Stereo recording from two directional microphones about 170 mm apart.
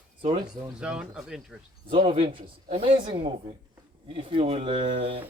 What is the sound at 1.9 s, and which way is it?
A man's voice, 30° right (ahead or behind).